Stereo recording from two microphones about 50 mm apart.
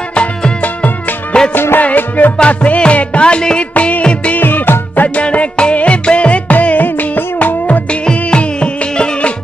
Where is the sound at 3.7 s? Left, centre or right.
Left.